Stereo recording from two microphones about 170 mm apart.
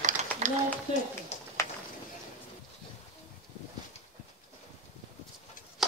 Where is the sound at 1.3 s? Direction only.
40° left (ahead or behind).